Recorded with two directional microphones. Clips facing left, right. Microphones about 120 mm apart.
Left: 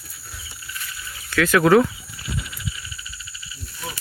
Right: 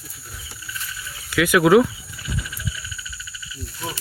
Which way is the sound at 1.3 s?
15° right (ahead or behind).